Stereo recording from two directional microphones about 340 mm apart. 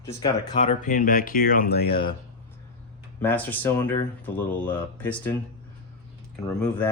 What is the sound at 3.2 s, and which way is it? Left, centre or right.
Speech, centre.